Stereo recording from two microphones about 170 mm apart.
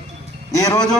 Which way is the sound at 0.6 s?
20° left (ahead or behind).